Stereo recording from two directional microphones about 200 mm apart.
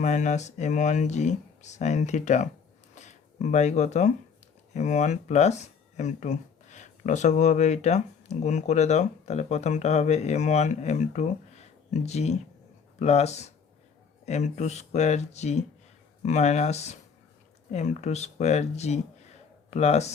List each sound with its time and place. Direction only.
0.0 s speech: 35° left (ahead or behind)
2.9 s a sound: 35° left (ahead or behind)
4.7 s speech: 35° left (ahead or behind)